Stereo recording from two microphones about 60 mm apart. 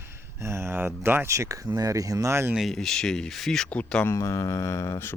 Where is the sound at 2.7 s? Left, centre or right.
Centre.